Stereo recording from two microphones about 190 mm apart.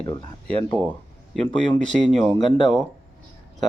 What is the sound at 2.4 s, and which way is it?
Speech, 25° left (ahead or behind).